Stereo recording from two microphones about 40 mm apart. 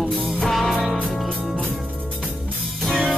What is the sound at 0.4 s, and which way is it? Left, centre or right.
Music, centre.